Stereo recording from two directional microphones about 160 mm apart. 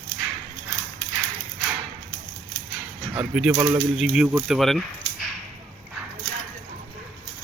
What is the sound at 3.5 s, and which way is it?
Speech, 15° right (ahead or behind).